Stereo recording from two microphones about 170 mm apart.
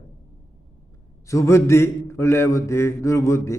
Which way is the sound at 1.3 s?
15° left (ahead or behind).